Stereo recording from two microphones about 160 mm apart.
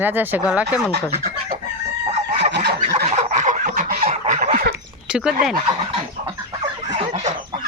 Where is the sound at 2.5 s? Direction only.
90° right.